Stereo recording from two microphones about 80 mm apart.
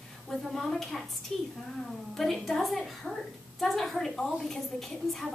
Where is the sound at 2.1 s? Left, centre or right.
Centre.